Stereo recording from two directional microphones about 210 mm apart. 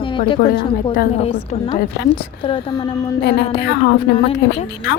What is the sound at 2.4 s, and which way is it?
Speech, 25° left (ahead or behind).